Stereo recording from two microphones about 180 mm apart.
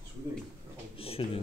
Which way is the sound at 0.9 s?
30° left (ahead or behind).